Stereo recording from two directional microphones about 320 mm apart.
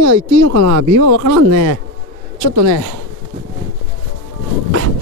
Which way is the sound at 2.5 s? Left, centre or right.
Right.